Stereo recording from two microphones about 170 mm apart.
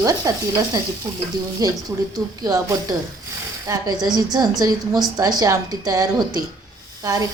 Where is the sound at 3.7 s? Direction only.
20° right (ahead or behind).